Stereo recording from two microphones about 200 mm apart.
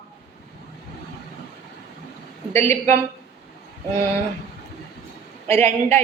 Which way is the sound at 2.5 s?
10° left (ahead or behind).